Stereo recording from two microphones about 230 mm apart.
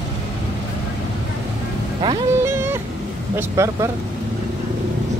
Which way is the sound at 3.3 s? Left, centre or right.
Centre.